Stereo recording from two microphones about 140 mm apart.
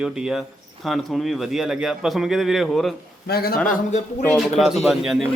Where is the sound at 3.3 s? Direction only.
90° left.